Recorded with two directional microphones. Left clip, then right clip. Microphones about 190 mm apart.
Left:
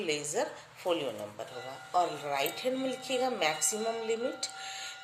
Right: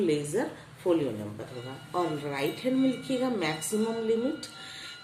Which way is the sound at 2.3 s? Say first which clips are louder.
Right 1 dB; 30° left (ahead or behind).